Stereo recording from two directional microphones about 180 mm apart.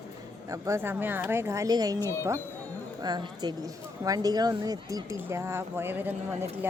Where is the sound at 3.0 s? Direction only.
25° right (ahead or behind).